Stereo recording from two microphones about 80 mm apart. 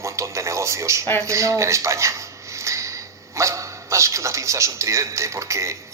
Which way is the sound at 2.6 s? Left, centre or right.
Right.